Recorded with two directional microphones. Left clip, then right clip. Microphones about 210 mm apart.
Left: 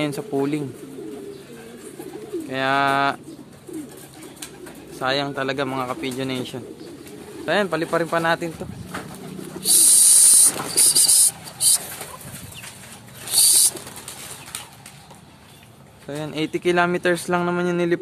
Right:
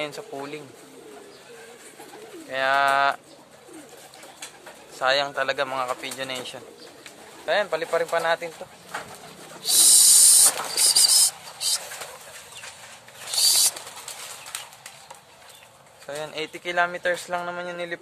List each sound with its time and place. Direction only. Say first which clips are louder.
0.0 s speech: left 8 dB; 10° left (ahead or behind)
2.5 s speech: left 1 dB; centre (ahead or behind)
4.9 s speech: right 1 dB; 5° right (ahead or behind); by 8.5 s 15° left (ahead or behind)
9.6 s bird: right 1 dB; 10° left (ahead or behind)
10.8 s a sound: right 1 dB; 10° left (ahead or behind)
13.3 s patter: left 1 dB; 20° left (ahead or behind)
16.1 s speech: left 5 dB; 5° left (ahead or behind); by 17.9 s 20° left (ahead or behind)